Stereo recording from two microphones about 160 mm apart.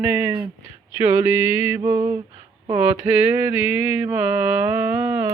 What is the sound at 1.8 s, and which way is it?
Speech, 20° right (ahead or behind).